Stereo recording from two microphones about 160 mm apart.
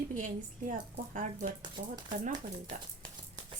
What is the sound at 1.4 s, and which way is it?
Speech, 40° right (ahead or behind).